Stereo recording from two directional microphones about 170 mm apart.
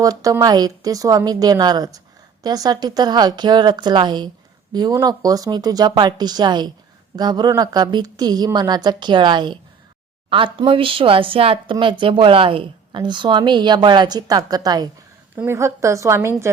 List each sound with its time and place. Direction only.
0.0 s a woman's voice: 20° right (ahead or behind)